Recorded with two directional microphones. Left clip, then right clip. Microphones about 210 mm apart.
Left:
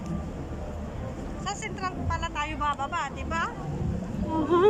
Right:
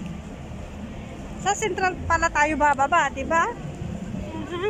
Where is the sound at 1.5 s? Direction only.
55° right (ahead or behind); by 3.5 s 35° right (ahead or behind).